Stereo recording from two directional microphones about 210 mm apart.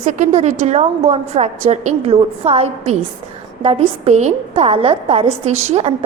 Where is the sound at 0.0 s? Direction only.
35° right (ahead or behind).